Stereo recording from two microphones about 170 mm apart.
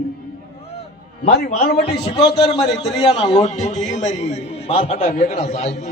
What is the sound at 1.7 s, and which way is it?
A man's voice, 35° left (ahead or behind).